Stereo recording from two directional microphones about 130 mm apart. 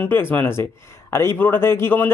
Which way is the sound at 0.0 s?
15° left (ahead or behind).